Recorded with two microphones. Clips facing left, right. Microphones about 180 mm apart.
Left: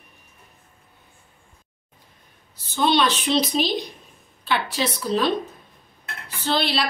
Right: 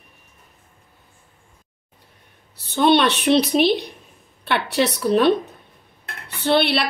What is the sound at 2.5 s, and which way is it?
A woman's voice, 65° right (ahead or behind).